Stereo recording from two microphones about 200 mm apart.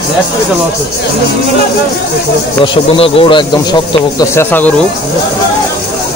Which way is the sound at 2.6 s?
25° left (ahead or behind).